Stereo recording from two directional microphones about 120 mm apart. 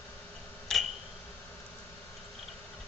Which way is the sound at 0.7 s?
5° left (ahead or behind).